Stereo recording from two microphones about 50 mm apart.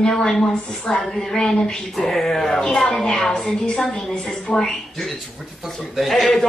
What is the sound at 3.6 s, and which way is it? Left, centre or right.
A woman's voice, centre.